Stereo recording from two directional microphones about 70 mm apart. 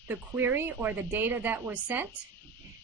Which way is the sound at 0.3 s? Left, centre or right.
Right.